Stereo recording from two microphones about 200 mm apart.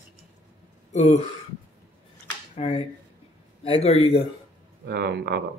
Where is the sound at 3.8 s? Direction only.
30° left (ahead or behind).